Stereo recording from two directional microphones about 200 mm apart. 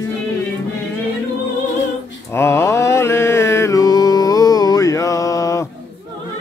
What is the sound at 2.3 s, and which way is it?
Mantra, 15° left (ahead or behind).